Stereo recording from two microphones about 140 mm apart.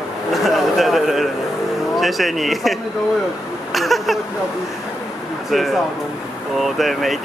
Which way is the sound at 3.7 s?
Centre (ahead or behind).